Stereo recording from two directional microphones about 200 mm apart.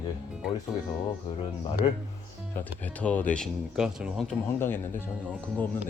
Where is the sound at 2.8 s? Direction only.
10° left (ahead or behind).